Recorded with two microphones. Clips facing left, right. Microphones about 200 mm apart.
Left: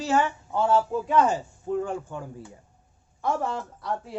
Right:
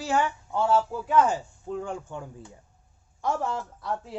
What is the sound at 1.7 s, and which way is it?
Speech, 15° left (ahead or behind).